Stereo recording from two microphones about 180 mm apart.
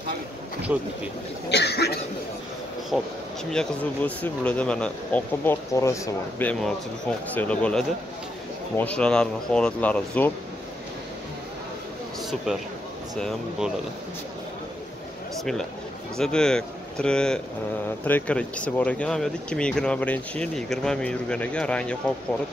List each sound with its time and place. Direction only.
0.7 s speech: 10° right (ahead or behind)
1.5 s speech: 70° left (ahead or behind)
2.9 s speech: centre (ahead or behind)
12.5 s speech: 5° right (ahead or behind)
16.2 s speech: 5° left (ahead or behind)